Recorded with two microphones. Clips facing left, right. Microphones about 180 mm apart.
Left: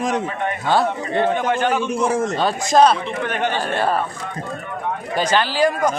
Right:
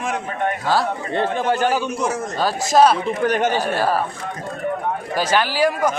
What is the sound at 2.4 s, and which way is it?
Speech, 5° right (ahead or behind).